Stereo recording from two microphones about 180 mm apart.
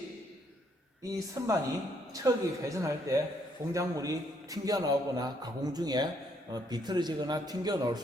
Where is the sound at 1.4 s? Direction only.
20° right (ahead or behind).